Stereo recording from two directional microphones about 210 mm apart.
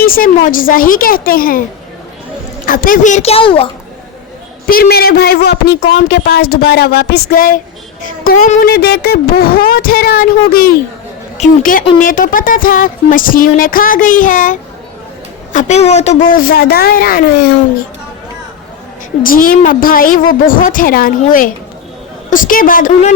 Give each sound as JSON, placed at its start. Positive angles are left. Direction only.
{"t": 0.0, "sound": "a woman's voice", "side_deg": 45}
{"t": 2.6, "sound": "speech", "side_deg": 40}
{"t": 4.6, "sound": "a woman's voice", "side_deg": 45}
{"t": 19.2, "sound": "speech", "side_deg": 40}